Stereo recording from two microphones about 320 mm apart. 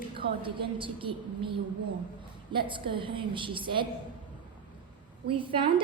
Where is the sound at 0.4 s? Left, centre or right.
Centre.